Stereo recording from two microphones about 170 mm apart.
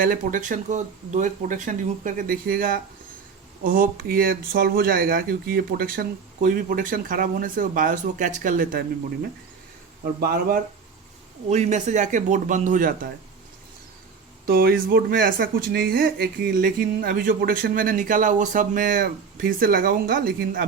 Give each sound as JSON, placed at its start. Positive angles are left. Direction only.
{"t": 0.0, "sound": "speech", "side_deg": -50}
{"t": 10.2, "sound": "speech", "side_deg": -60}
{"t": 11.4, "sound": "speech", "side_deg": -45}
{"t": 14.4, "sound": "speech", "side_deg": -60}